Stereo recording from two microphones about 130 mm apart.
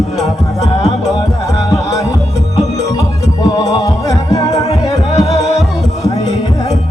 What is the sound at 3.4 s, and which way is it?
Music, 30° left (ahead or behind).